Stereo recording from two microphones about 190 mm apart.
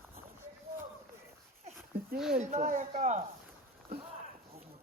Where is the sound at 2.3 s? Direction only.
40° right (ahead or behind).